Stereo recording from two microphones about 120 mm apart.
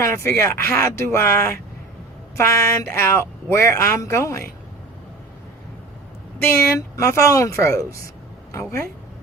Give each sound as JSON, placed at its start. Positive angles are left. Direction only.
{"t": 0.0, "sound": "a woman's voice", "side_deg": 20}
{"t": 6.4, "sound": "a woman's voice", "side_deg": 25}